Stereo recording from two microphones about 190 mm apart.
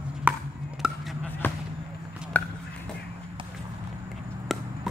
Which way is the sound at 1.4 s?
10° left (ahead or behind).